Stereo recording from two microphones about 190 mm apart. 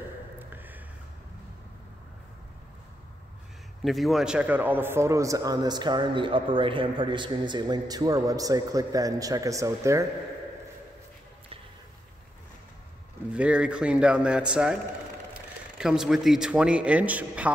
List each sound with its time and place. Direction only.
0.4 s a sound: 10° right (ahead or behind)
3.8 s a man's voice: centre (ahead or behind); by 10.0 s 15° right (ahead or behind)
13.3 s speech: 5° right (ahead or behind)
15.8 s speech: 5° right (ahead or behind)